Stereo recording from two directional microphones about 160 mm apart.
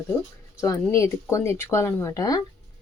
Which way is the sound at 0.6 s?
20° left (ahead or behind).